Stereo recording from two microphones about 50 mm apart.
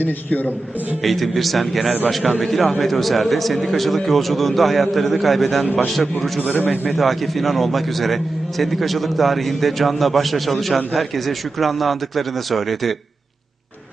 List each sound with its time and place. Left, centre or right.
0.0 s a man's voice: left
1.0 s a man's voice: centre